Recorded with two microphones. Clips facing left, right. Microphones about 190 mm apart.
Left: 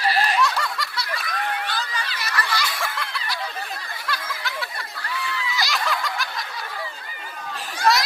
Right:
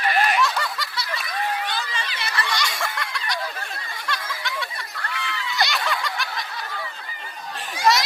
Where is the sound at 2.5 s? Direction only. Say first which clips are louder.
Even; centre (ahead or behind).